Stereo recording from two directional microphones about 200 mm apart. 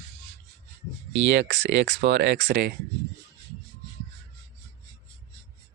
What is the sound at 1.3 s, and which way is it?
Speech, 65° right (ahead or behind).